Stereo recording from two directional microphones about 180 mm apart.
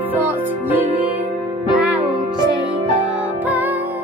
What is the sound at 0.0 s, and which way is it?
Music, 10° right (ahead or behind).